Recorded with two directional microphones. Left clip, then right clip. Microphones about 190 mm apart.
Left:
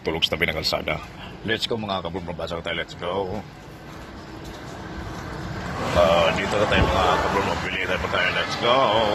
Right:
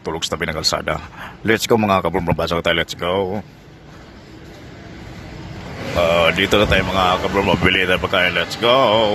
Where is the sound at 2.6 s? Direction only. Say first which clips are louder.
Right 10 dB; 90° right.